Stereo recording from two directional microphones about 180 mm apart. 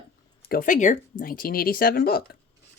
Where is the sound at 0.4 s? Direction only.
50° left (ahead or behind).